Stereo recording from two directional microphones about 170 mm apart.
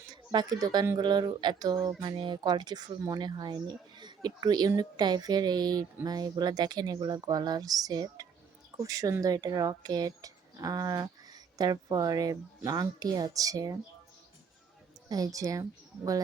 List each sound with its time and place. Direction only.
0.1 s speech: 25° right (ahead or behind)
15.1 s speech: 20° right (ahead or behind)